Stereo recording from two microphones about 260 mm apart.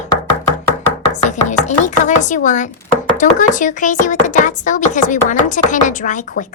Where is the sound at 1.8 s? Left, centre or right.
Left.